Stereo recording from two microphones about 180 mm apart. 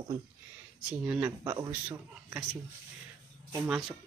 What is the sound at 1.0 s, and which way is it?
Speech, 10° right (ahead or behind).